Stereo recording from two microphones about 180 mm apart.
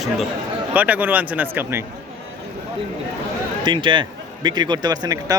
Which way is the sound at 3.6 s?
25° right (ahead or behind).